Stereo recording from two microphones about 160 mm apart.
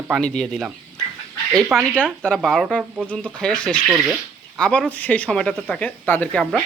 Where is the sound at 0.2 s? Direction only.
5° left (ahead or behind).